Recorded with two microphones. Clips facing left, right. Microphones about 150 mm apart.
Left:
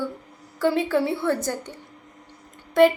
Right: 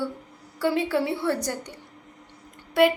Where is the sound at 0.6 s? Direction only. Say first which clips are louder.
Left 2 dB; 15° right (ahead or behind).